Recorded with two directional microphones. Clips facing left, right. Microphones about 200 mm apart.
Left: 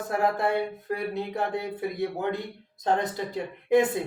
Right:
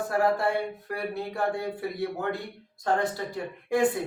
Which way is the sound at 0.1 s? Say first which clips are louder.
Even; 20° left (ahead or behind).